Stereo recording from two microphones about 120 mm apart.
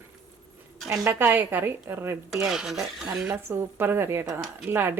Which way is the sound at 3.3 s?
20° right (ahead or behind).